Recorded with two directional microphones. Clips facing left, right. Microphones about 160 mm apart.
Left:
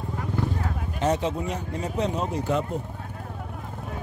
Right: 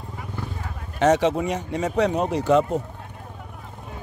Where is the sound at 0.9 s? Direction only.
80° right.